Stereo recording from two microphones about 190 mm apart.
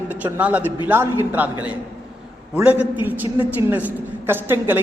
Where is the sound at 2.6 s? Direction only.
10° right (ahead or behind).